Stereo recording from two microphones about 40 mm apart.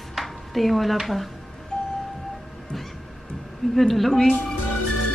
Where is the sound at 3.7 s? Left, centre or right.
Centre.